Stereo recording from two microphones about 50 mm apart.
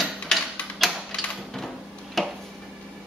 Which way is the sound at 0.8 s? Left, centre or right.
Centre.